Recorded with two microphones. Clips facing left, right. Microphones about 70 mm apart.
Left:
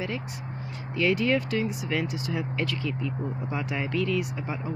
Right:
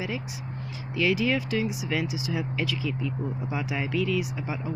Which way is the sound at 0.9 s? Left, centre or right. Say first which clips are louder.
Left 1 dB; centre.